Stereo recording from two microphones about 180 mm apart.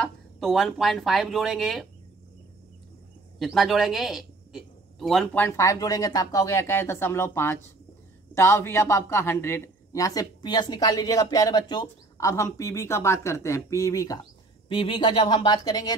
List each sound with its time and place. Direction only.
0.0 s speech: centre (ahead or behind)
3.3 s a woman's voice: centre (ahead or behind); by 16.0 s 20° left (ahead or behind)